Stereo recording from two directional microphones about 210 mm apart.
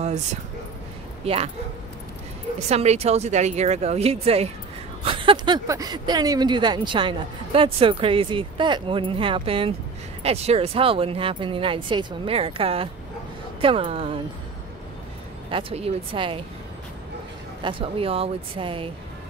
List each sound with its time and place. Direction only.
1.2 s speech: 30° right (ahead or behind)
2.7 s speech: 30° right (ahead or behind)
15.5 s speech: 25° right (ahead or behind)
17.6 s speech: 25° right (ahead or behind)